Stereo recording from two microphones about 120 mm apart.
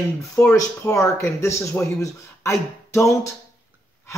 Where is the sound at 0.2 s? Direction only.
25° left (ahead or behind).